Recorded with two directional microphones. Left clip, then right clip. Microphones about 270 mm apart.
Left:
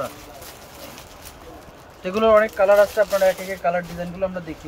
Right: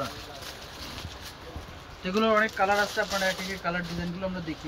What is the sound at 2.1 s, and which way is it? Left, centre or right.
Speech, centre.